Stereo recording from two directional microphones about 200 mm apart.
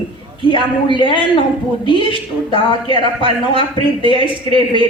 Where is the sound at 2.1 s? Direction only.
25° left (ahead or behind).